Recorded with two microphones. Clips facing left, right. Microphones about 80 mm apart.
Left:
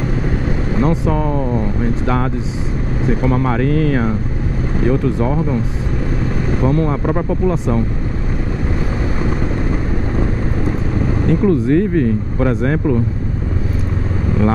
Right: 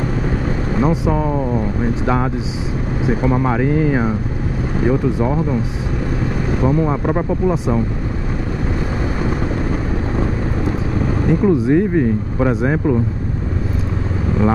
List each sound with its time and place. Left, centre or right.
0.7 s speech: centre
6.6 s speech: centre
11.2 s speech: centre